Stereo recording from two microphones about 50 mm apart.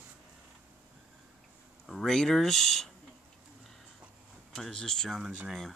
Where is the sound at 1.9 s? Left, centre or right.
Centre.